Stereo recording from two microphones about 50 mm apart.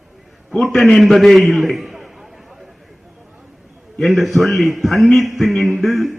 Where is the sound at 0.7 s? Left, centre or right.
Centre.